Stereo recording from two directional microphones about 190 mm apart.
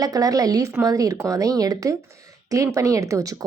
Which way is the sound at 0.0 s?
20° right (ahead or behind).